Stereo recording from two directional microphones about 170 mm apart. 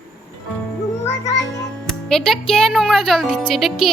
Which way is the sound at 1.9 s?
5° left (ahead or behind).